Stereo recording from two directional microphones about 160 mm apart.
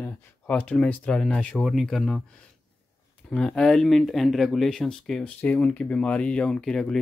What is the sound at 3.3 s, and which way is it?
Speech, 5° left (ahead or behind).